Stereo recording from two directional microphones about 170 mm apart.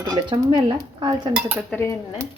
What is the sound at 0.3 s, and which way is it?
Dishes, 30° right (ahead or behind).